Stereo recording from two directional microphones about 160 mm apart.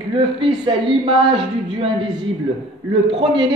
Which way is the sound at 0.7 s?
30° right (ahead or behind).